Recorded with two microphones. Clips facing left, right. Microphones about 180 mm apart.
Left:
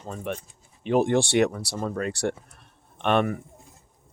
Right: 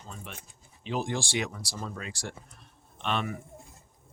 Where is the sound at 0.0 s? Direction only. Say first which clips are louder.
Left 12 dB; 55° left (ahead or behind).